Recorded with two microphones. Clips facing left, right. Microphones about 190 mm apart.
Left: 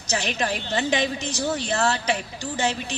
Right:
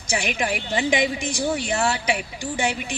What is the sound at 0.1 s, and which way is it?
A woman's voice, 10° right (ahead or behind).